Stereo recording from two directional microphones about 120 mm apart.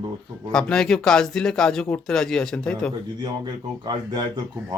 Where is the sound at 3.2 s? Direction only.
35° right (ahead or behind).